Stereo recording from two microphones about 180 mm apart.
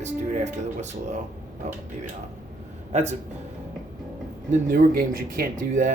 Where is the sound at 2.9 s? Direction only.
40° right (ahead or behind).